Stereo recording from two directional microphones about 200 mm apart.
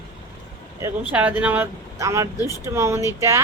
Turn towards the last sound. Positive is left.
turn(degrees=-15)  # may be behind; listen again after turning